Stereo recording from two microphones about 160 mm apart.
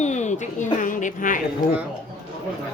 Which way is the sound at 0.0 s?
45° left (ahead or behind).